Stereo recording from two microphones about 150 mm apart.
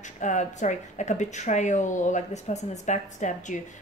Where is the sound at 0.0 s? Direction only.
55° left (ahead or behind).